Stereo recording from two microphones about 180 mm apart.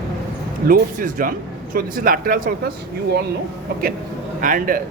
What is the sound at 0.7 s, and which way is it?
Speech, 50° right (ahead or behind).